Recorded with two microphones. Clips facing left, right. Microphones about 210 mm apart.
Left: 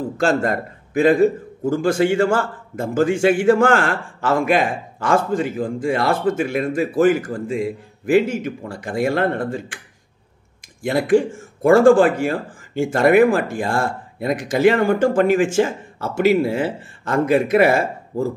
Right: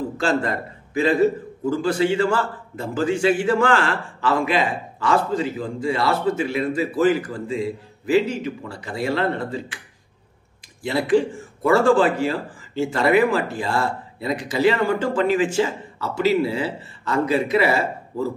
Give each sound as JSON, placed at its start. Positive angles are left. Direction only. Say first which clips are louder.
{"t": 0.2, "sound": "a man's voice", "louder": "left 4 dB", "side_deg": 45}
{"t": 10.8, "sound": "a man's voice", "louder": "left 3 dB", "side_deg": 50}